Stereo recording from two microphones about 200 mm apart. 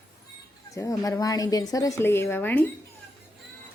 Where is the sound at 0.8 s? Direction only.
15° left (ahead or behind).